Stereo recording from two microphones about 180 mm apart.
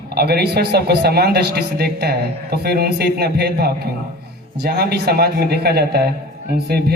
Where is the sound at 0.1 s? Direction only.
60° right (ahead or behind).